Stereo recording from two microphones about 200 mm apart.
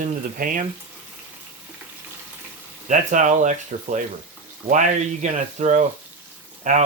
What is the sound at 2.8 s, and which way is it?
Speech, 40° right (ahead or behind).